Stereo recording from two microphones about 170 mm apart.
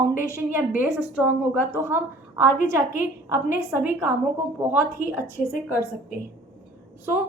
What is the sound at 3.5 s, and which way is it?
A woman's voice, 10° right (ahead or behind).